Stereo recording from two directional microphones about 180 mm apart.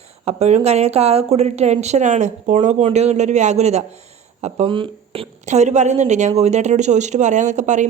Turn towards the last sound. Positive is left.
turn(degrees=-40)  # may be behind; listen again after turning